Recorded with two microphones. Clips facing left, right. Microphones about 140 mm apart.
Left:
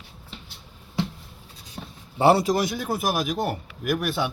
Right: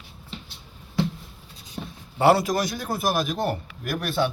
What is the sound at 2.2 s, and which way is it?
Speech, 25° left (ahead or behind).